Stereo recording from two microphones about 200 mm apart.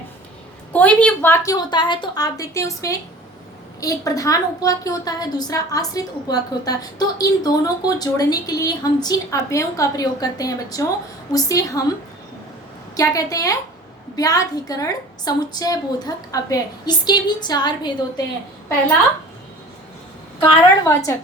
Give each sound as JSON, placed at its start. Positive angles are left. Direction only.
{"t": 0.7, "sound": "a woman's voice", "side_deg": 5}
{"t": 13.0, "sound": "a woman's voice", "side_deg": 15}
{"t": 20.4, "sound": "a woman's voice", "side_deg": 15}